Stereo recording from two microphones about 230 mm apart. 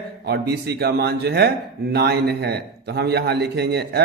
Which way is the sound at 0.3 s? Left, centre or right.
Right.